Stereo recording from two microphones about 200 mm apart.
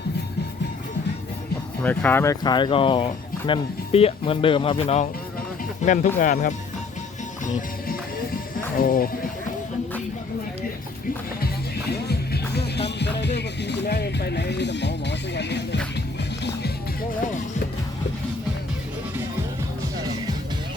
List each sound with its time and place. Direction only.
1.8 s speech: 10° left (ahead or behind); by 6.5 s 40° left (ahead or behind)
7.4 s music: 40° left (ahead or behind)
8.8 s speech: 45° left (ahead or behind)
11.9 s music: 55° left (ahead or behind)